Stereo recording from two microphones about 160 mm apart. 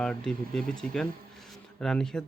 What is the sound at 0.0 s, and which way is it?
Speech, 5° left (ahead or behind).